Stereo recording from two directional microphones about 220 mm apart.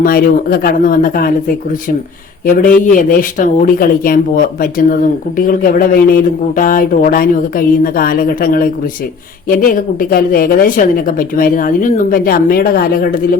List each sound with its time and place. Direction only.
0.0 s speech: 40° left (ahead or behind)
2.5 s a woman's voice: 35° left (ahead or behind)